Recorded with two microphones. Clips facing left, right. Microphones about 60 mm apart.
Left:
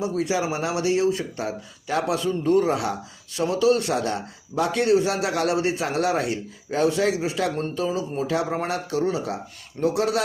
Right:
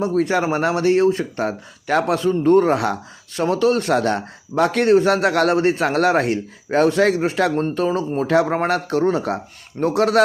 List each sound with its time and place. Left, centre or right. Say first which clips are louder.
0.0 s speech: right 5 dB; right
2.1 s speech: right 6 dB; right
7.9 s speech: right 5 dB; right
8.3 s speech: right 9 dB; right